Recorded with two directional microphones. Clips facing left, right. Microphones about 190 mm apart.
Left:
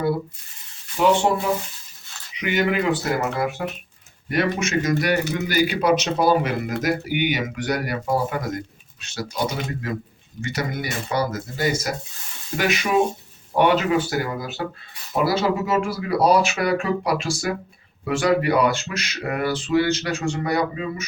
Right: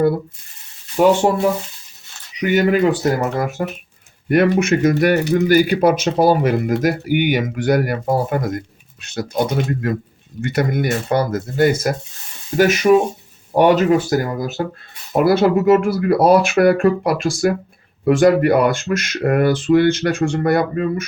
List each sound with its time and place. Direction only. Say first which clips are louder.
1.0 s speech: right 5 dB; 50° right (ahead or behind)
2.4 s speech: right 7 dB; 40° right (ahead or behind)
4.3 s speech: right 8 dB; 55° right (ahead or behind)
12.5 s speech: right 8 dB; 45° right (ahead or behind)
15.1 s speech: right 7 dB; 55° right (ahead or behind)